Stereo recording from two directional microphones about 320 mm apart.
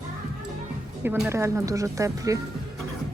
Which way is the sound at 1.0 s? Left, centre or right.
Centre.